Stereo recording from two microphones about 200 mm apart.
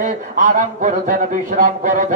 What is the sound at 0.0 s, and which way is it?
Speech, 40° right (ahead or behind).